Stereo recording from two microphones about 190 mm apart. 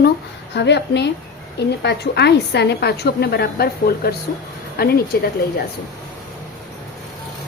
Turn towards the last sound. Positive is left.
turn(degrees=55)  # may be behind; listen again after turning